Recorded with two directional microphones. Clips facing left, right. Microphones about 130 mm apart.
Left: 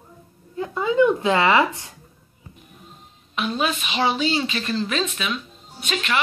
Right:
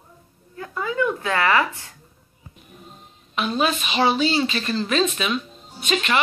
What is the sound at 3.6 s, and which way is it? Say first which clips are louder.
Speech: right 3 dB; 10° left (ahead or behind).